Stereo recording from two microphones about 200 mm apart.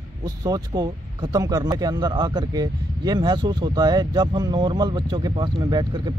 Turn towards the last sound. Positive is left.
turn(degrees=-20)  # may be behind; listen again after turning